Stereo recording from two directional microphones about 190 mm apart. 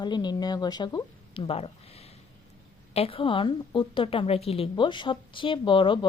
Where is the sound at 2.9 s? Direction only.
30° left (ahead or behind).